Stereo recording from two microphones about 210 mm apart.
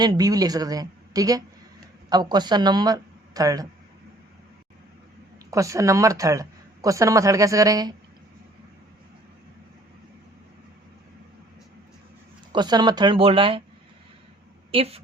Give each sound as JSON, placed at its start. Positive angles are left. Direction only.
{"t": 0.0, "sound": "speech", "side_deg": -20}
{"t": 5.5, "sound": "speech", "side_deg": -15}
{"t": 12.5, "sound": "speech", "side_deg": -20}
{"t": 14.7, "sound": "speech", "side_deg": -30}